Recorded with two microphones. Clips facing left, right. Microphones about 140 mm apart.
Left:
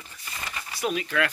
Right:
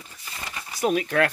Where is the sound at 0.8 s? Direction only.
50° right (ahead or behind).